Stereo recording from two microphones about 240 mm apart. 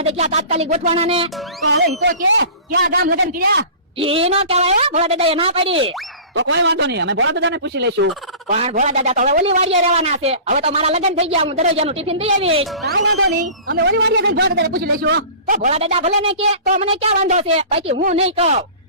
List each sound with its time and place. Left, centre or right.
0.0 s a man's voice: right
1.7 s a man's voice: right
3.9 s a man's voice: right
6.3 s a man's voice: right
8.4 s a man's voice: right
13.7 s a man's voice: right